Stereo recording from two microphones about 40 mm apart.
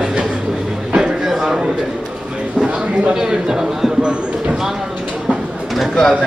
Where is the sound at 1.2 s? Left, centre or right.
Centre.